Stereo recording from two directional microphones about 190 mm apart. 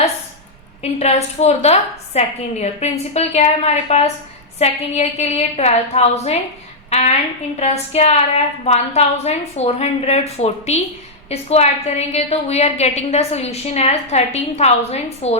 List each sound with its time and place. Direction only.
0.8 s a woman's voice: 35° left (ahead or behind)